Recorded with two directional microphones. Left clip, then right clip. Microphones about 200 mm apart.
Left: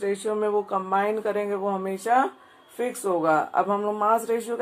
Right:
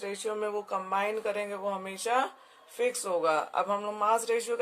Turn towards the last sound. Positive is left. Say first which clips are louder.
# left 4 dB
turn(degrees=-40)  # may be behind; listen again after turning